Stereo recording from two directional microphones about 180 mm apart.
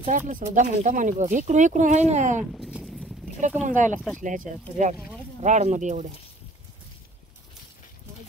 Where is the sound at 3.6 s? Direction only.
45° right (ahead or behind).